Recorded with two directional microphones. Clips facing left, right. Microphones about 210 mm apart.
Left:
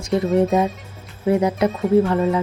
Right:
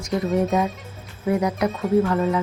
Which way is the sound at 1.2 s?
25° left (ahead or behind).